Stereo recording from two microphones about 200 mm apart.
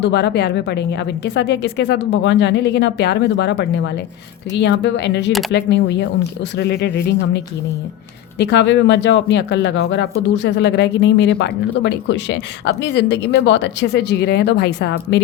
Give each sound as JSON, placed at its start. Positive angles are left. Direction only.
{"t": 0.0, "sound": "speech", "side_deg": 60}